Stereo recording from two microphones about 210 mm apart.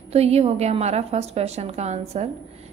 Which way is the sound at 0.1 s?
30° right (ahead or behind).